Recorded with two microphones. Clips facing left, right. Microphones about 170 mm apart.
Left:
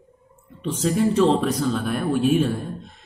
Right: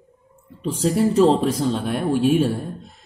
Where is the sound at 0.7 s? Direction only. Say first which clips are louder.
Right 2 dB; 35° right (ahead or behind).